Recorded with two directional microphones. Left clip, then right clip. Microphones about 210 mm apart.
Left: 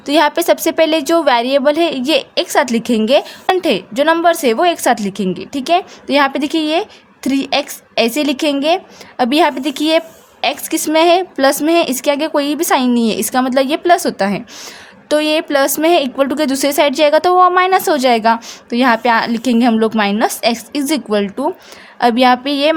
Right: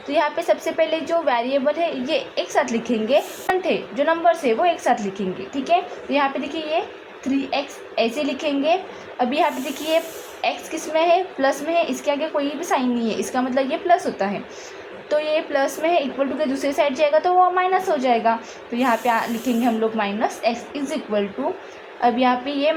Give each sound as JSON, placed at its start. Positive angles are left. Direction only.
{"t": 0.1, "sound": "a woman's voice", "side_deg": 50}